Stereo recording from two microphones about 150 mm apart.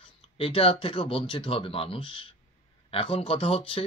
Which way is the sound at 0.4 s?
40° left (ahead or behind).